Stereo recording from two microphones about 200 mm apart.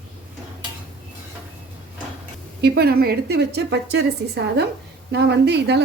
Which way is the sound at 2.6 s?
55° right (ahead or behind).